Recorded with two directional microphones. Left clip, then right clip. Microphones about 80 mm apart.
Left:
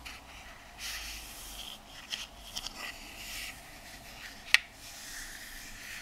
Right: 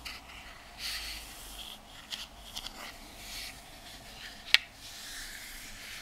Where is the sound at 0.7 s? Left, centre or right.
Centre.